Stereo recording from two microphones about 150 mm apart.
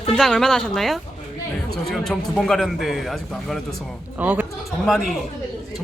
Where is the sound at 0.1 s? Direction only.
5° left (ahead or behind).